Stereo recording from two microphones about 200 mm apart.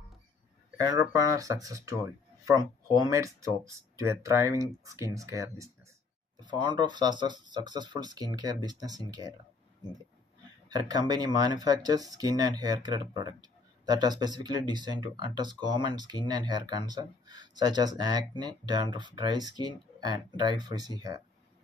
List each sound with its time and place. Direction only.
0.8 s speech: 15° right (ahead or behind)
10.7 s speech: 20° right (ahead or behind)